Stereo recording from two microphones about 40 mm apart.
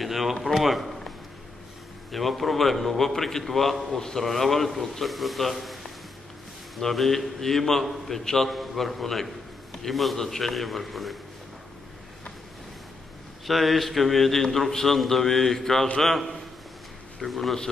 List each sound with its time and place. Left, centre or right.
0.0 s a man's voice: centre
2.1 s a man's voice: centre
6.8 s a man's voice: centre
13.5 s a man's voice: centre
17.2 s a man's voice: centre